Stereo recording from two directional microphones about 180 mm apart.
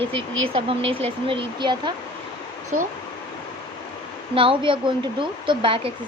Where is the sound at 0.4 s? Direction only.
30° right (ahead or behind).